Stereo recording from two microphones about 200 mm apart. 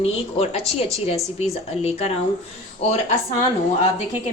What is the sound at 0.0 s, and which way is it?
A woman's voice, 30° left (ahead or behind).